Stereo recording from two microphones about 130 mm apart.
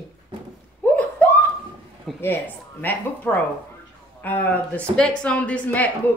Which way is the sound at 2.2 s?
15° left (ahead or behind).